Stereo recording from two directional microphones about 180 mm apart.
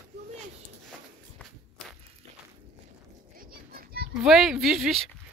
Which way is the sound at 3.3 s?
55° right (ahead or behind).